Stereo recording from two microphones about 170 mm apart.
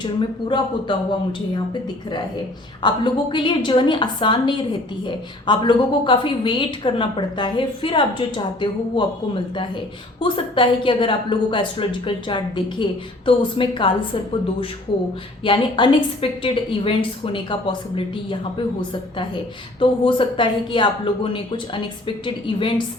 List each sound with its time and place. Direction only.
0.0 s a woman's voice: 25° left (ahead or behind)
2.8 s a woman's voice: 25° left (ahead or behind)